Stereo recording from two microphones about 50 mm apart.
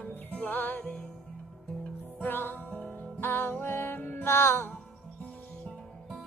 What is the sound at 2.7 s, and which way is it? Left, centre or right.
Music, left.